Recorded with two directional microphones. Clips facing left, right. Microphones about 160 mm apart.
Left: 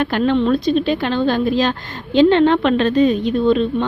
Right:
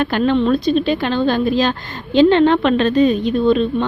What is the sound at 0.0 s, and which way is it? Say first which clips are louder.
A woman's voice: right 1 dB; 35° right (ahead or behind).